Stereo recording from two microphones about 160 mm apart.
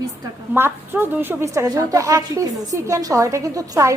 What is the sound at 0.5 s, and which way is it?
A woman's voice, 15° right (ahead or behind).